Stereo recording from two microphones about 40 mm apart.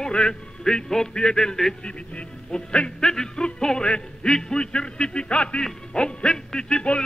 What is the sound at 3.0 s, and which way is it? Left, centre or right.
Speech, centre.